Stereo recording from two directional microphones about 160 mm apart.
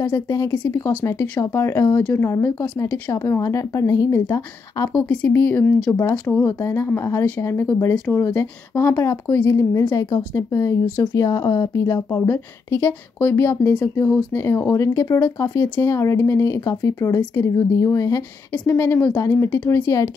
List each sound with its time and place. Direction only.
0.0 s a woman's voice: 15° left (ahead or behind)
4.9 s speech: 5° left (ahead or behind)